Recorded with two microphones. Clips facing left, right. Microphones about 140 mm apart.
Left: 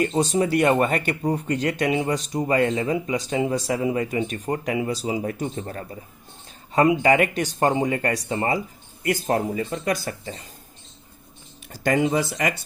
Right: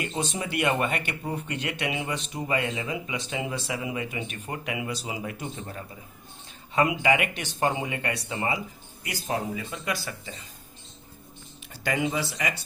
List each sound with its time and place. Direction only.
0.0 s speech: 40° left (ahead or behind)
11.7 s speech: 45° left (ahead or behind)